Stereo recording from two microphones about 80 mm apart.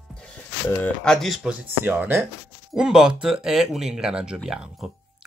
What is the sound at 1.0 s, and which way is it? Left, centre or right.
Speech, centre.